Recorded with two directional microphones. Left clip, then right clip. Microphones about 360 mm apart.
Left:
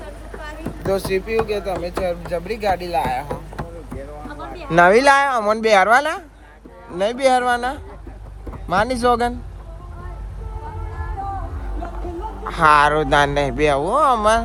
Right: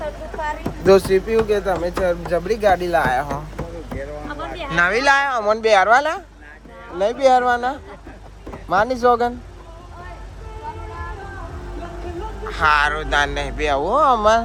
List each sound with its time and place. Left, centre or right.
0.4 s music: centre
1.5 s speech: centre
4.7 s a woman's voice: centre
8.7 s speech: left
12.5 s speech: centre